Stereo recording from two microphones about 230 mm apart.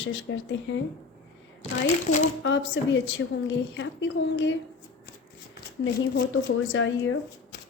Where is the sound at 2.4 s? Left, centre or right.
Left.